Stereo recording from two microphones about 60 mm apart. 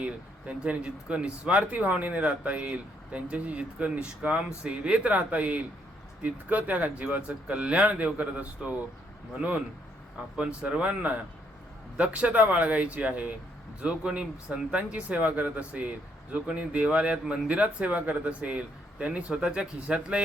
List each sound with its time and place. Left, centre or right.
0.0 s speech: right